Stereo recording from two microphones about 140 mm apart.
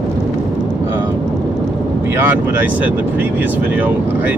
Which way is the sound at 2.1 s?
15° right (ahead or behind).